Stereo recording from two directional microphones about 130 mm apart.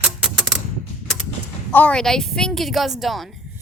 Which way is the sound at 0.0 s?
5° right (ahead or behind).